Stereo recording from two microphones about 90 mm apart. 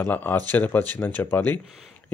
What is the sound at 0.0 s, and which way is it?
Speech, 20° left (ahead or behind).